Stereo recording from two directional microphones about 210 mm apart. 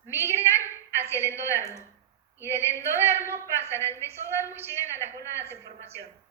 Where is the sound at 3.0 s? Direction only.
10° right (ahead or behind).